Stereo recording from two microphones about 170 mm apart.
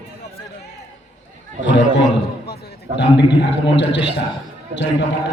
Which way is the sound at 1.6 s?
90° left.